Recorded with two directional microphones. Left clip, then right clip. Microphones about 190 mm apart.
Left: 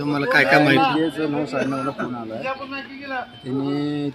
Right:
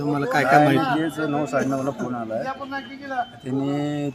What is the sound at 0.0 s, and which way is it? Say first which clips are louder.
Speech: left 3 dB; 15° right (ahead or behind).